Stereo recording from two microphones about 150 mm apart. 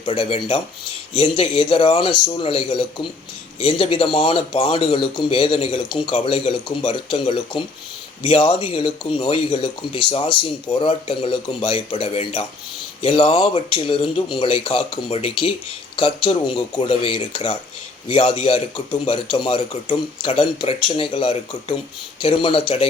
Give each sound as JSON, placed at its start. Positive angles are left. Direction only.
{"t": 0.0, "sound": "speech", "side_deg": 35}